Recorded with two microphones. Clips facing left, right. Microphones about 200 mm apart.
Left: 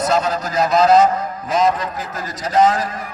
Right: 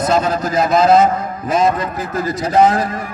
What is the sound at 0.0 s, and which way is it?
A man's voice, 50° right (ahead or behind).